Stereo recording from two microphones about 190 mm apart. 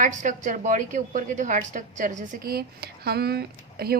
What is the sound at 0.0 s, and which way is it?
A woman's voice, 40° right (ahead or behind).